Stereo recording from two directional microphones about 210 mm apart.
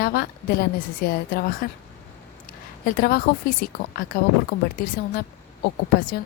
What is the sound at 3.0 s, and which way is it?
Speech, 45° left (ahead or behind).